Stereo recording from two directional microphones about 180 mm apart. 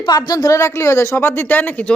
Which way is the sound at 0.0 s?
25° left (ahead or behind).